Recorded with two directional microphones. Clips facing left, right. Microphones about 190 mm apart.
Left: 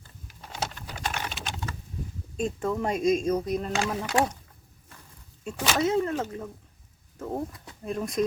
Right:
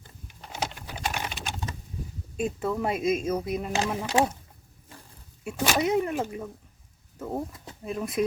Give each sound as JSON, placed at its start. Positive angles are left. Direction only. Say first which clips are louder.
{"t": 0.5, "sound": "pigeon", "louder": "right 1 dB", "side_deg": -10}
{"t": 2.3, "sound": "speech", "louder": "even", "side_deg": -5}
{"t": 4.0, "sound": "speech", "louder": "right 2 dB", "side_deg": -20}
{"t": 5.4, "sound": "speech", "louder": "even", "side_deg": -10}
{"t": 7.5, "sound": "speech", "louder": "right 3 dB", "side_deg": -25}
{"t": 7.9, "sound": "speech", "louder": "even", "side_deg": -5}